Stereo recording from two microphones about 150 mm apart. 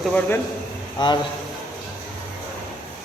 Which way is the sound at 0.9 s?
30° left (ahead or behind).